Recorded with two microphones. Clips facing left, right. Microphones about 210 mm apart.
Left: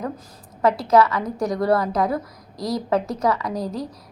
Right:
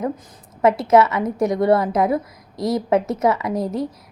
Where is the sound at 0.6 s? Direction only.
20° right (ahead or behind).